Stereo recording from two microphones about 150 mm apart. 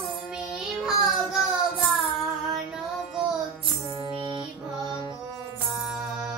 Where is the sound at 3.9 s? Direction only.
35° right (ahead or behind).